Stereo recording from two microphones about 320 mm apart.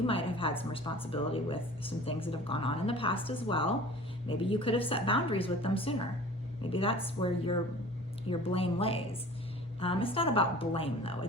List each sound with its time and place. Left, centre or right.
0.1 s a woman's voice: centre